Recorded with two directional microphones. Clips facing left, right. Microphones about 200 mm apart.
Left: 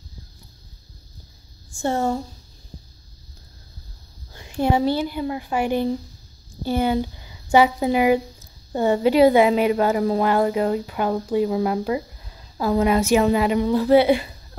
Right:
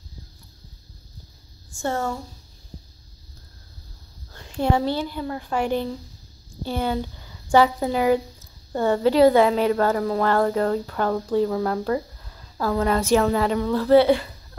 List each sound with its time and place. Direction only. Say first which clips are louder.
1.7 s speech: left 4 dB; 30° left (ahead or behind)
4.3 s a woman's voice: left 2 dB; 10° left (ahead or behind)